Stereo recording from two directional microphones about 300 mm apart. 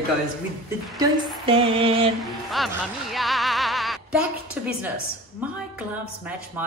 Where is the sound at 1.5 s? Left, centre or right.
Centre.